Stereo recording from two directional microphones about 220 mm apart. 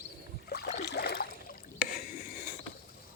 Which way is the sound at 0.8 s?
50° left (ahead or behind).